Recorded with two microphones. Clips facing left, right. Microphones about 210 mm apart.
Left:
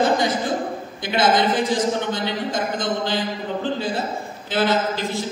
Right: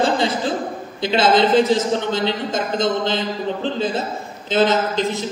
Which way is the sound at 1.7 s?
25° right (ahead or behind).